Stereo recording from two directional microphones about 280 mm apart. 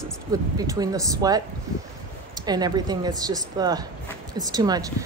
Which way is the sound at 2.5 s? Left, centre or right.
Centre.